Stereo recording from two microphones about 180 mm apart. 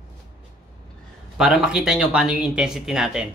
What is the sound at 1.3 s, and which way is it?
Speech, 5° right (ahead or behind).